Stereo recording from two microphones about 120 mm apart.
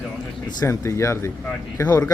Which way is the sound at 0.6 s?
25° left (ahead or behind).